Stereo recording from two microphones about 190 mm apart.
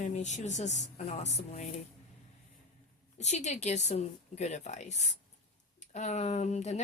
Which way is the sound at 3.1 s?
35° left (ahead or behind).